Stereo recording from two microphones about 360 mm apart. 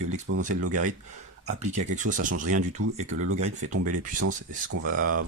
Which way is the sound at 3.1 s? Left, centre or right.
Right.